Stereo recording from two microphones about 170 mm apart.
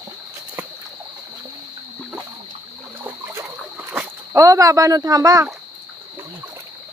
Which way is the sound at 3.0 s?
15° right (ahead or behind).